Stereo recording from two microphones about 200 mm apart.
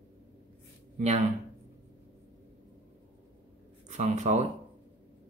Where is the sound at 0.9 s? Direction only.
40° right (ahead or behind).